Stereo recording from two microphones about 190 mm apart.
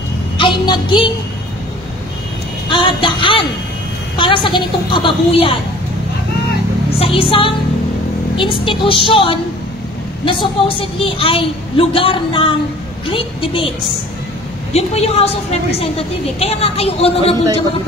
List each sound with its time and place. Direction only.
0.4 s child singing: 25° left (ahead or behind)
2.7 s a sound: 25° left (ahead or behind)
4.2 s a woman's voice: 25° left (ahead or behind)
7.0 s a woman's voice: 30° left (ahead or behind)
14.7 s a woman's voice: 35° left (ahead or behind)